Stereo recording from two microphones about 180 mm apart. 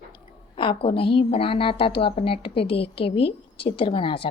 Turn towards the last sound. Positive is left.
turn(degrees=30)  # may be behind; listen again after turning